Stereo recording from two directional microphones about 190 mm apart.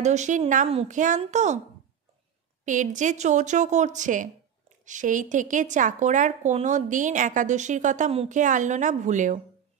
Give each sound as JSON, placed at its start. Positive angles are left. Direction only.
{"t": 0.0, "sound": "speech", "side_deg": -40}
{"t": 2.6, "sound": "speech", "side_deg": -40}